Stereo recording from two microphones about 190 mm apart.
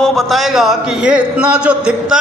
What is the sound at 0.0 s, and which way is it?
A man's voice, centre (ahead or behind).